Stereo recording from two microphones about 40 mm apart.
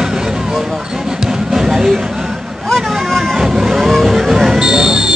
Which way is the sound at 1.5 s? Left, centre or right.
Centre.